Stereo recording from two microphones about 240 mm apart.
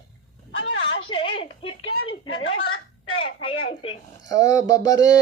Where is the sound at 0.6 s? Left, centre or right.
Left.